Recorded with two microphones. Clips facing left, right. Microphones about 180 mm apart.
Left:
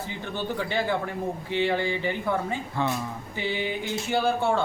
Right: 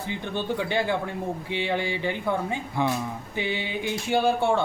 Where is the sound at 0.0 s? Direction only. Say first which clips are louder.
Right 2 dB; 15° right (ahead or behind).